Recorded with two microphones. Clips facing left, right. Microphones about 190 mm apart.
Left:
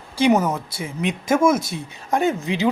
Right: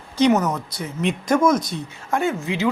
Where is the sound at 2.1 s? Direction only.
15° left (ahead or behind).